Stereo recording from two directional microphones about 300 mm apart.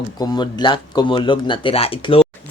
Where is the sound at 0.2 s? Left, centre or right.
Centre.